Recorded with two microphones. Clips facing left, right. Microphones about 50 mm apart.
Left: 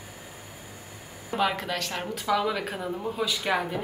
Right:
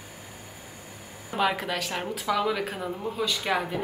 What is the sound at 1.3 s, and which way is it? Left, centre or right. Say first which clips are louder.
A woman's voice: right 1 dB; centre.